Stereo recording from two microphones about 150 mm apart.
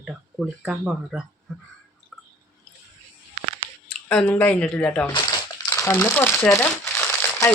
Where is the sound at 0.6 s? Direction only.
5° right (ahead or behind).